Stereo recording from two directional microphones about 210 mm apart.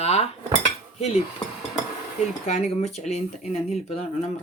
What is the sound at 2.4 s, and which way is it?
Speech, 35° left (ahead or behind).